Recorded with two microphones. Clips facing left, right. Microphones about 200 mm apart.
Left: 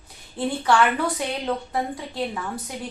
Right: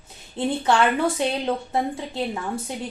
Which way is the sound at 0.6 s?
25° right (ahead or behind).